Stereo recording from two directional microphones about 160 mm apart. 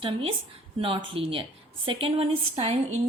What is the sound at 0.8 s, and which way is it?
Speech, 35° right (ahead or behind).